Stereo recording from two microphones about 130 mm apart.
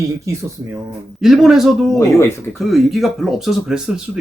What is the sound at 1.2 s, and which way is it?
Speech, centre (ahead or behind).